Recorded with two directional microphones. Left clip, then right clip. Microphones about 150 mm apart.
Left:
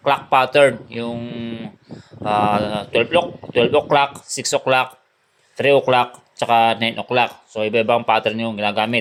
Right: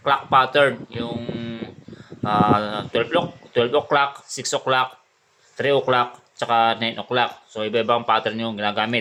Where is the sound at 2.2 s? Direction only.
30° left (ahead or behind).